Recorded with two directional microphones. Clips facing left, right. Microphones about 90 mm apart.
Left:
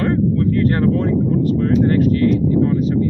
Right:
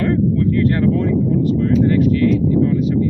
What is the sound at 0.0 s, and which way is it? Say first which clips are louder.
Speech: even; 35° left (ahead or behind).